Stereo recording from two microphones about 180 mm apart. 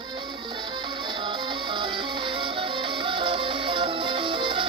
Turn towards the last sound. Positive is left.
turn(degrees=-30)  # may be behind; listen again after turning